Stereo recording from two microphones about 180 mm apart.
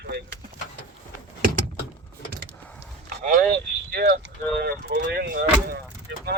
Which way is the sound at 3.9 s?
60° right (ahead or behind).